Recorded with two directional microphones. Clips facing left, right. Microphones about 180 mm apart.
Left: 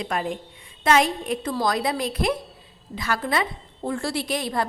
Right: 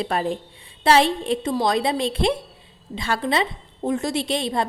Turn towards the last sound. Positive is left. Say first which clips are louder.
# right 2 dB
turn(degrees=-25)  # may be behind; listen again after turning